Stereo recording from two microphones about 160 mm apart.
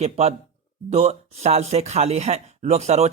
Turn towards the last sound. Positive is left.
turn(degrees=-45)  # may be behind; listen again after turning